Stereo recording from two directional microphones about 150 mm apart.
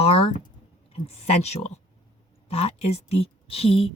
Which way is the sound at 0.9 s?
45° left (ahead or behind).